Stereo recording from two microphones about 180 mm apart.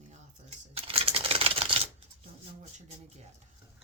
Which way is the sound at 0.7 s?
30° right (ahead or behind).